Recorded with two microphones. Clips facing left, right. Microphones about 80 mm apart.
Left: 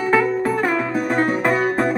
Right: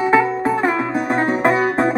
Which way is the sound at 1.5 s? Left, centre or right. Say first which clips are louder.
Right 2 dB; centre.